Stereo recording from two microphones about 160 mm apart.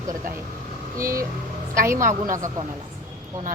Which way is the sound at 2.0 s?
55° right (ahead or behind).